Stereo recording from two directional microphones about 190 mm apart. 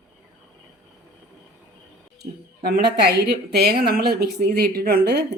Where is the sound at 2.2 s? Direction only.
55° right (ahead or behind).